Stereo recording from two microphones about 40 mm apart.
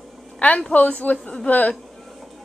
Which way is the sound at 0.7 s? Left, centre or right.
Left.